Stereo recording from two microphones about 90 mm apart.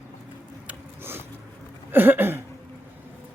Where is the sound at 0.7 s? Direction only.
25° right (ahead or behind).